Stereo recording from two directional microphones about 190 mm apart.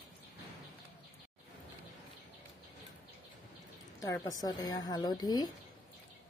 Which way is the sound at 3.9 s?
15° left (ahead or behind).